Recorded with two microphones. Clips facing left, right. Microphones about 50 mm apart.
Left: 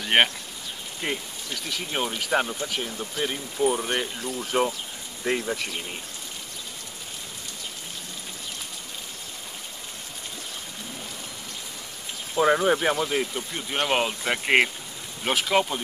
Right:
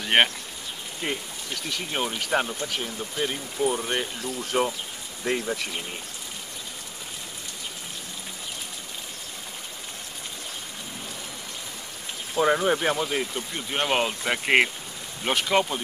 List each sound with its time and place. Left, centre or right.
0.0 s a sound: centre
1.0 s speech: centre
12.4 s speech: centre